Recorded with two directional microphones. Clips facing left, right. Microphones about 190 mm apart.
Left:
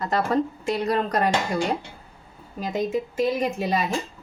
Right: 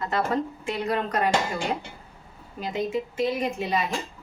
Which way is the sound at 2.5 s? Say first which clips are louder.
Left 2 dB; 40° left (ahead or behind).